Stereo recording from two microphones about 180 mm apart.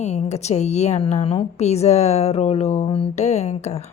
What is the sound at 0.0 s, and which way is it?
Speech, 40° left (ahead or behind).